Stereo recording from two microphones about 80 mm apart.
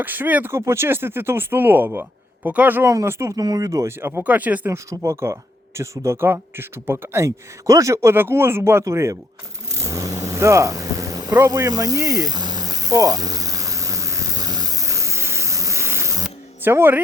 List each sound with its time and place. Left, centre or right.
0.0 s speech: right
0.5 s speech: right
2.9 s speech: right
3.3 s speech: right
4.2 s speech: centre
4.7 s speech: right
8.1 s speech: right
9.7 s vehicle: right
11.3 s snake: right
16.6 s speech: right